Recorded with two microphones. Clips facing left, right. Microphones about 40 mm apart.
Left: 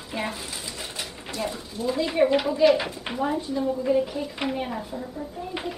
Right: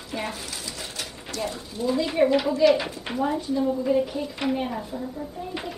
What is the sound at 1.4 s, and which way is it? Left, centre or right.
Speech, centre.